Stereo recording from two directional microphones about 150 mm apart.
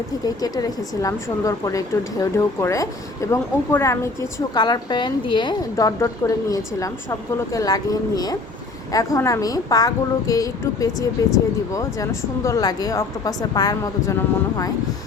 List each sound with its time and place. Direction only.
0.3 s speech: 25° left (ahead or behind)
4.5 s speech: 30° left (ahead or behind)